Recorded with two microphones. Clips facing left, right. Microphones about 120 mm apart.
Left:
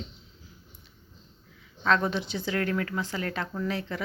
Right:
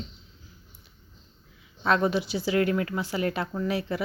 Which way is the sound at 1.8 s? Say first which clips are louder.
Right 2 dB; 10° right (ahead or behind).